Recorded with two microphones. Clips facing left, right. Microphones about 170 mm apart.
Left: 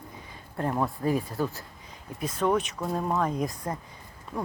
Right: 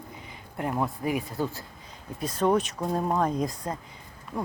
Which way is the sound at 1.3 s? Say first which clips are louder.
Even; 25° right (ahead or behind).